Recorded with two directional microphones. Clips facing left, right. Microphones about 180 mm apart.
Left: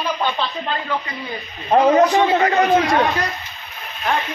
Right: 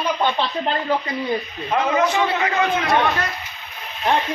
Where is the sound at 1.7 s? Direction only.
35° left (ahead or behind).